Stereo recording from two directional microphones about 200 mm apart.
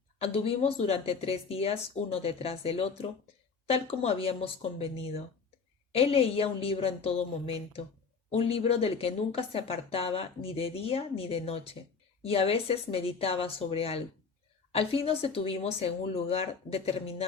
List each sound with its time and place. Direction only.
0.2 s speech: 30° left (ahead or behind)